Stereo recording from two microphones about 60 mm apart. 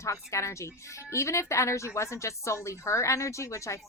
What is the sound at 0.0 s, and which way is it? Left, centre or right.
Speech, left.